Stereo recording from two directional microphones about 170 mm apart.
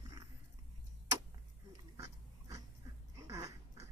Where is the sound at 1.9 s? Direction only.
20° right (ahead or behind).